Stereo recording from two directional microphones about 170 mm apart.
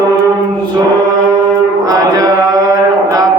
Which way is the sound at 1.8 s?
20° right (ahead or behind).